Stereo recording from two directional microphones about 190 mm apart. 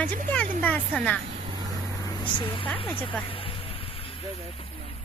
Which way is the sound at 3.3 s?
30° left (ahead or behind).